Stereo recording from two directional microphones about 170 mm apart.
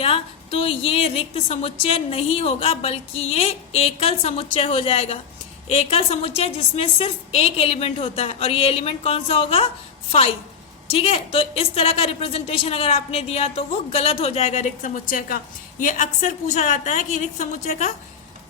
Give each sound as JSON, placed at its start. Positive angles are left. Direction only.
{"t": 0.0, "sound": "a woman's voice", "side_deg": 35}